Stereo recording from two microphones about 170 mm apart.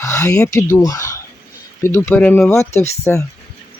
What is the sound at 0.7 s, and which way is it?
Speech, 20° left (ahead or behind).